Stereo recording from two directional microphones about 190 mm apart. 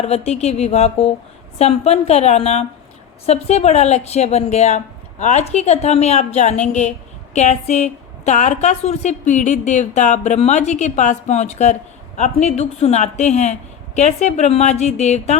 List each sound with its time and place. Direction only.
0.0 s a woman's voice: 35° left (ahead or behind)